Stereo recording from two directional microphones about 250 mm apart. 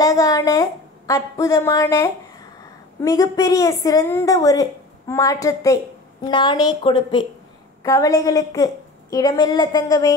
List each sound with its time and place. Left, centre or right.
0.0 s a woman's voice: centre